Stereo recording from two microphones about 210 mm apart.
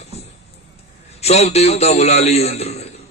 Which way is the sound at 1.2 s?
30° left (ahead or behind).